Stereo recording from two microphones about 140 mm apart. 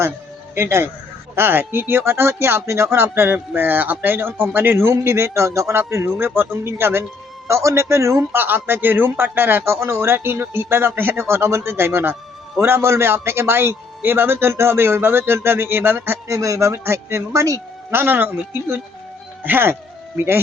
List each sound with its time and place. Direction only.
0.5 s a man's voice: 20° right (ahead or behind)
19.4 s a man's voice: 15° right (ahead or behind)